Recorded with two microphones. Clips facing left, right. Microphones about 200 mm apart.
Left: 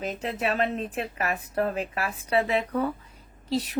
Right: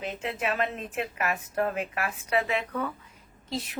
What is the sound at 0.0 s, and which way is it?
Speech, 40° left (ahead or behind).